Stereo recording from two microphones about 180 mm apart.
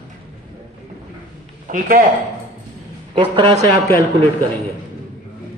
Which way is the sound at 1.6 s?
50° right (ahead or behind).